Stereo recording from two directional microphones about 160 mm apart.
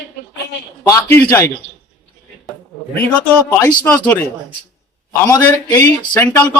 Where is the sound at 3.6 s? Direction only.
10° left (ahead or behind).